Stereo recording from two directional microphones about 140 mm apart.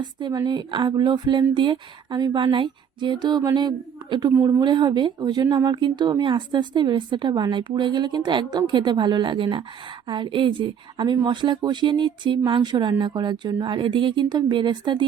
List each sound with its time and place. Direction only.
0.0 s speech: 30° right (ahead or behind)